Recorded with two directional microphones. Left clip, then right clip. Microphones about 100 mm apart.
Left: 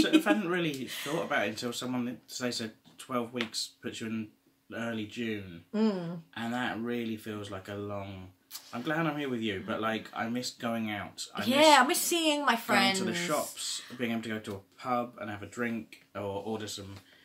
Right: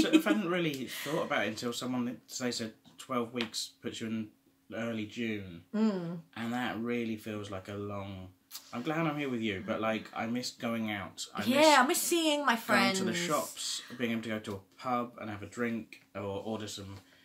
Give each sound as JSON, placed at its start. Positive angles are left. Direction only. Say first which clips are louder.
{"t": 0.2, "sound": "speech", "louder": "left 2 dB", "side_deg": -25}
{"t": 0.8, "sound": "speech", "louder": "left 1 dB", "side_deg": 15}
{"t": 1.3, "sound": "speech", "louder": "left 2 dB", "side_deg": -25}
{"t": 5.7, "sound": "speech", "louder": "left 2 dB", "side_deg": 15}
{"t": 6.3, "sound": "speech", "louder": "left 2 dB", "side_deg": -20}
{"t": 11.3, "sound": "speech", "louder": "left 2 dB", "side_deg": 15}
{"t": 12.9, "sound": "speech", "louder": "left 1 dB", "side_deg": -30}